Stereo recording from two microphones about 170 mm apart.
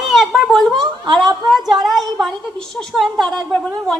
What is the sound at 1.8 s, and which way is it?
A woman's voice, centre (ahead or behind).